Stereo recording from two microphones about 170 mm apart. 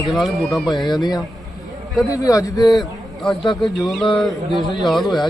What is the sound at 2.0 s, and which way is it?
Speech, 20° left (ahead or behind).